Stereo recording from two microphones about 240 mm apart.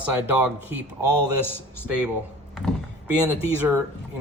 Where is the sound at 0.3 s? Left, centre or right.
Centre.